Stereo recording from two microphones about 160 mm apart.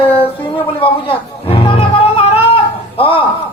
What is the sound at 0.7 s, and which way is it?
Music, 35° left (ahead or behind).